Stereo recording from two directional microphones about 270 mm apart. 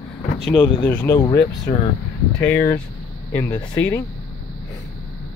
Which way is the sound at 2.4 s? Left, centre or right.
Centre.